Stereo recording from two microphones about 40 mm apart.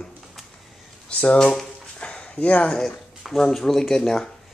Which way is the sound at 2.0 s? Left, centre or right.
Left.